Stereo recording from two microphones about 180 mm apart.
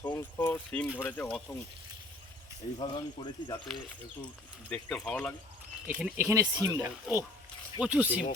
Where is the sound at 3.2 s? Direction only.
20° left (ahead or behind).